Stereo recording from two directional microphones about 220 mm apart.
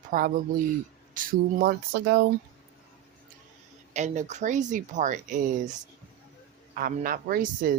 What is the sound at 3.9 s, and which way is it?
Speech, 30° right (ahead or behind).